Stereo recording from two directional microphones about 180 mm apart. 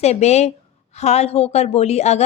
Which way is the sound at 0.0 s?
35° left (ahead or behind).